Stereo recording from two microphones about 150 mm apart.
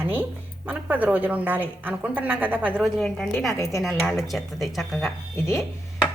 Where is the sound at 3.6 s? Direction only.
20° left (ahead or behind).